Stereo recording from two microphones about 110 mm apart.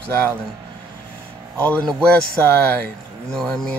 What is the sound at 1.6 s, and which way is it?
Speech, 10° left (ahead or behind).